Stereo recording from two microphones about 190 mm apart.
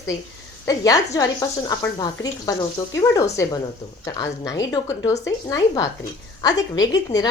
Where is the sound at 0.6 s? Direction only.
20° left (ahead or behind).